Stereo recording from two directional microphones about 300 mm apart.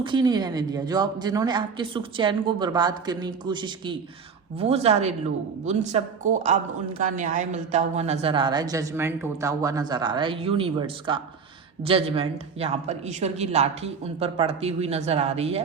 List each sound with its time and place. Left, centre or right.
0.0 s a woman's voice: centre